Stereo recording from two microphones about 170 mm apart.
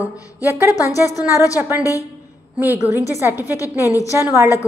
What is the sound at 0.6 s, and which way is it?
Speech, 20° left (ahead or behind).